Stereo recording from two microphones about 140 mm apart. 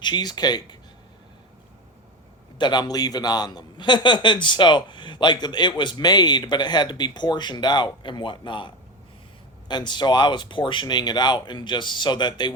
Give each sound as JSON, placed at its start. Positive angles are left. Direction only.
{"t": 0.0, "sound": "speech", "side_deg": 30}
{"t": 2.6, "sound": "a man's voice", "side_deg": 30}